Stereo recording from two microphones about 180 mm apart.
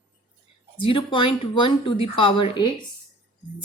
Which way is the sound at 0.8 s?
30° left (ahead or behind).